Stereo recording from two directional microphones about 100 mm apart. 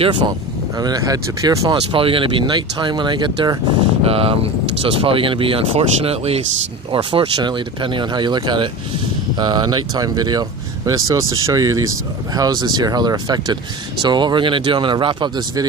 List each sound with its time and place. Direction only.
0.7 s speech: 40° right (ahead or behind)
1.7 s speech: 60° right (ahead or behind)
4.0 s speech: 75° right (ahead or behind)
6.9 s speech: 60° right (ahead or behind)